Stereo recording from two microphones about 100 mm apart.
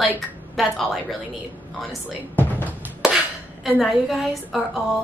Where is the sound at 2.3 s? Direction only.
20° left (ahead or behind).